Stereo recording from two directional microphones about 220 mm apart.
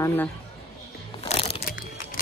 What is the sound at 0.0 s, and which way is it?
Speech, 10° left (ahead or behind).